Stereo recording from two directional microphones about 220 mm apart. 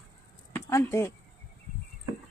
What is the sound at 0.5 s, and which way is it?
Speech, 10° left (ahead or behind).